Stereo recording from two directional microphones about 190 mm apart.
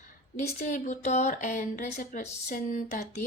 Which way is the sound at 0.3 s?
40° left (ahead or behind).